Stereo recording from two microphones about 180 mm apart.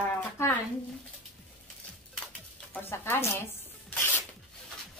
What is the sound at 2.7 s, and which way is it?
Speech, 10° left (ahead or behind).